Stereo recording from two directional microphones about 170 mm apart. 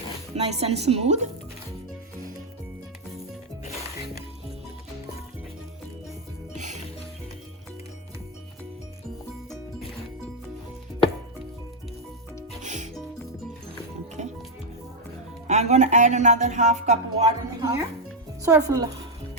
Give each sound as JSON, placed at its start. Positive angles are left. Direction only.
{"t": 0.3, "sound": "a woman's voice", "side_deg": -40}
{"t": 12.6, "sound": "music", "side_deg": -45}
{"t": 14.2, "sound": "music", "side_deg": -45}
{"t": 15.4, "sound": "speech", "side_deg": -40}
{"t": 18.4, "sound": "speech", "side_deg": -20}